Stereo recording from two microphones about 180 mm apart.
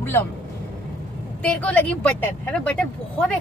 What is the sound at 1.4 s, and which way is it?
Speech, 5° left (ahead or behind).